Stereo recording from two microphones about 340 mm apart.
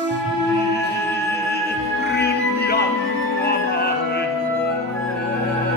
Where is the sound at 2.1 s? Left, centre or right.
Left.